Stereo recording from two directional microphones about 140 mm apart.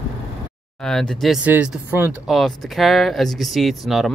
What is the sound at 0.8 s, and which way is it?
Speech, 5° left (ahead or behind).